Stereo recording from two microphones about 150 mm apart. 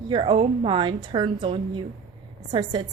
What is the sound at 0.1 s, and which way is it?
A woman's voice, 35° right (ahead or behind).